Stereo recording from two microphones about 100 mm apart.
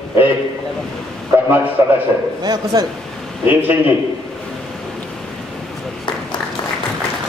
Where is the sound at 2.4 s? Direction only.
45° right (ahead or behind).